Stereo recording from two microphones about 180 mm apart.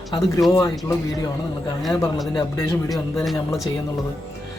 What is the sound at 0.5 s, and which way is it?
Speech, 20° left (ahead or behind).